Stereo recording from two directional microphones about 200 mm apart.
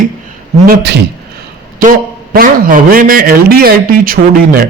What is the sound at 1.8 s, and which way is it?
A man's voice, 45° right (ahead or behind).